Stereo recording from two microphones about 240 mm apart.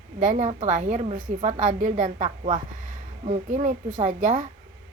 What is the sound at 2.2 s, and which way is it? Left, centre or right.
Speech, centre.